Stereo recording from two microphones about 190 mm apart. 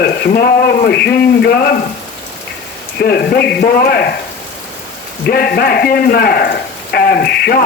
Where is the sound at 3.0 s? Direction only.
55° left (ahead or behind).